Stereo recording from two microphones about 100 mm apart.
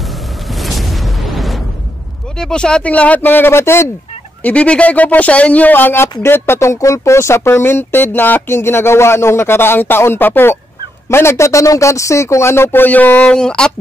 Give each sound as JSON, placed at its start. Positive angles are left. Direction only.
{"t": 0.6, "sound": "a sound", "side_deg": 0}
{"t": 2.3, "sound": "speech", "side_deg": 10}
{"t": 4.4, "sound": "speech", "side_deg": 15}